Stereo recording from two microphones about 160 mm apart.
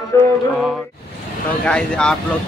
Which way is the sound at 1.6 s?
5° left (ahead or behind).